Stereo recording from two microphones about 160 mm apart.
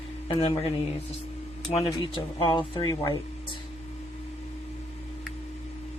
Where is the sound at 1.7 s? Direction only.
35° left (ahead or behind).